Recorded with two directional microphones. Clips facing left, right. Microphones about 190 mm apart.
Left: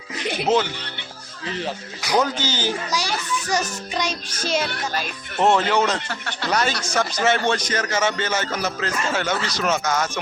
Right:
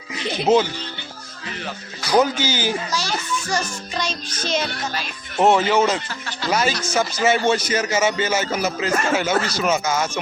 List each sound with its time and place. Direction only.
0.5 s speech: 10° right (ahead or behind)
2.1 s speech: 10° right (ahead or behind)
2.9 s a child's voice: 15° left (ahead or behind)
3.9 s music: 15° left (ahead or behind)
5.4 s speech: 5° right (ahead or behind)
6.1 s speech: 60° left (ahead or behind)
6.5 s speech: 5° right (ahead or behind)
9.3 s speech: 50° right (ahead or behind)
9.6 s speech: 5° right (ahead or behind)